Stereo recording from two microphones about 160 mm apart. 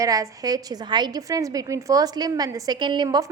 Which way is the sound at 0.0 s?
20° right (ahead or behind).